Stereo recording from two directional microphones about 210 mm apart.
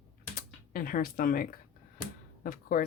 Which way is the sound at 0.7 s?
45° left (ahead or behind).